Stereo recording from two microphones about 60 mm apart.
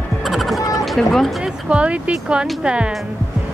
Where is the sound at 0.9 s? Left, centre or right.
Centre.